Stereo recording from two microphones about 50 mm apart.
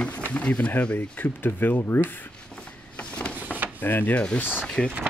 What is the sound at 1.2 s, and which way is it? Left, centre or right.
Speech, left.